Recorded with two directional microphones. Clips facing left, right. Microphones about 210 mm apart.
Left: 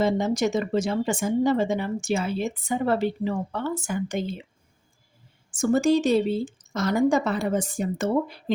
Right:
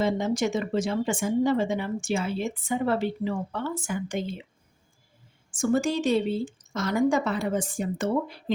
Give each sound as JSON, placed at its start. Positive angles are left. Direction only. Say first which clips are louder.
{"t": 0.0, "sound": "speech", "louder": "left 2 dB", "side_deg": 40}
{"t": 5.5, "sound": "speech", "louder": "left 4 dB", "side_deg": 40}